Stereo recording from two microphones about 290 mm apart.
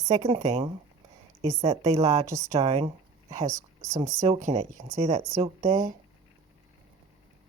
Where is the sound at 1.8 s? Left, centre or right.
Right.